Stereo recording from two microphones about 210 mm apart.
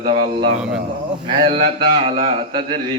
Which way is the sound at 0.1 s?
25° right (ahead or behind).